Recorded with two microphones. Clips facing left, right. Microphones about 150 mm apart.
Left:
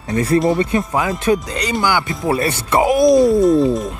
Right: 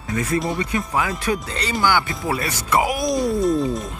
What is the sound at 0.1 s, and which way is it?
Speech, 30° left (ahead or behind).